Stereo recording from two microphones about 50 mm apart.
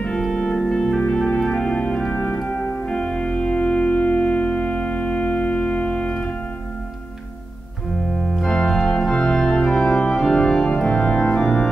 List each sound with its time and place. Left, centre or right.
0.2 s organ: centre
0.6 s music: centre
1.4 s organ: centre
1.8 s organ: left
2.4 s music: left
8.2 s organ: centre